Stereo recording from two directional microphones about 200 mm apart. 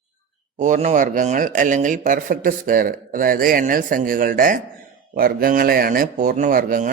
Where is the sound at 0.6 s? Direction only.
35° right (ahead or behind).